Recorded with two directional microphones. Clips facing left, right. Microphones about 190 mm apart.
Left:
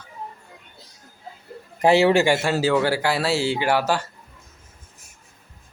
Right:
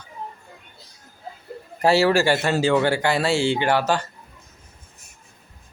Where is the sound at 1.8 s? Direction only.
20° left (ahead or behind).